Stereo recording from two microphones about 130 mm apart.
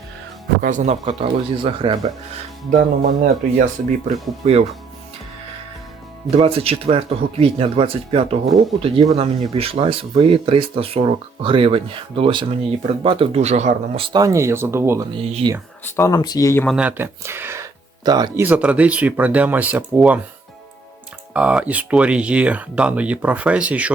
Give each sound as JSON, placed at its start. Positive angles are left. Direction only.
{"t": 0.6, "sound": "speech", "side_deg": -70}
{"t": 1.0, "sound": "speech", "side_deg": -45}
{"t": 2.7, "sound": "speech", "side_deg": -90}
{"t": 3.6, "sound": "speech", "side_deg": -55}
{"t": 6.3, "sound": "speech", "side_deg": -50}
{"t": 14.0, "sound": "speech", "side_deg": -30}
{"t": 15.1, "sound": "speech", "side_deg": -50}
{"t": 15.8, "sound": "speech", "side_deg": 20}
{"t": 16.6, "sound": "speech", "side_deg": -5}
{"t": 17.0, "sound": "speech", "side_deg": -20}
{"t": 18.3, "sound": "speech", "side_deg": -15}
{"t": 21.3, "sound": "speech", "side_deg": -10}